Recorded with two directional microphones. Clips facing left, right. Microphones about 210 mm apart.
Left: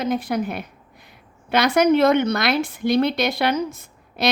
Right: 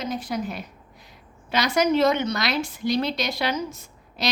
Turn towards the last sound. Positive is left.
turn(degrees=55)  # may be behind; listen again after turning